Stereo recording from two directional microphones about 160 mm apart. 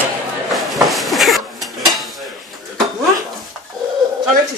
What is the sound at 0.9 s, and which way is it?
Dishes, centre (ahead or behind).